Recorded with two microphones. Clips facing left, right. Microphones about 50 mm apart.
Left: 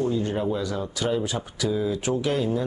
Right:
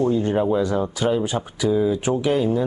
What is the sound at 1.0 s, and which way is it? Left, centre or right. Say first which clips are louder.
Speech: right 1 dB; centre.